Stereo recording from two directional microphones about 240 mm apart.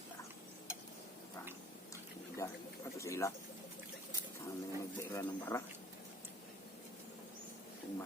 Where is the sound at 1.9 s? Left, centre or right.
Centre.